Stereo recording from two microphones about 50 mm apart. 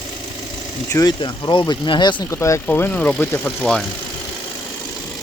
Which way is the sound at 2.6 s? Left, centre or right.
Left.